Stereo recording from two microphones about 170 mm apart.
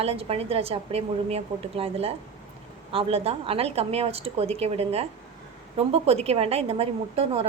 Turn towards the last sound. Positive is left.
turn(degrees=-35)  # may be behind; listen again after turning